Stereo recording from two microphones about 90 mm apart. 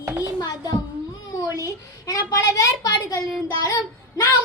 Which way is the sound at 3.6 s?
40° left (ahead or behind).